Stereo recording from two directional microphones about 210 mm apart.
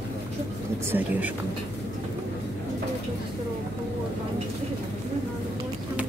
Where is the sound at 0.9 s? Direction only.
10° right (ahead or behind).